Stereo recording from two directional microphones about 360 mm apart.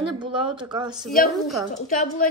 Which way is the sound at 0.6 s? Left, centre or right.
Centre.